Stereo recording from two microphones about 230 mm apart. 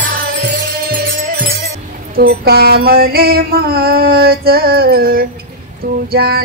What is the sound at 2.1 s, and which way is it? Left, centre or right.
Female singing, right.